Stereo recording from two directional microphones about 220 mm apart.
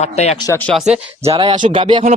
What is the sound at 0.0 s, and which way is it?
Speech, 30° left (ahead or behind).